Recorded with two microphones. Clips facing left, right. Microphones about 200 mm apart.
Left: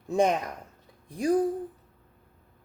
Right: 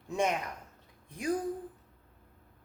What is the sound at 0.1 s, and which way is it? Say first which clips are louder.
Speech: left 7 dB; 35° left (ahead or behind).